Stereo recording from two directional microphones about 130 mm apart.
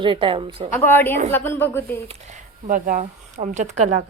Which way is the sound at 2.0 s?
55° right (ahead or behind).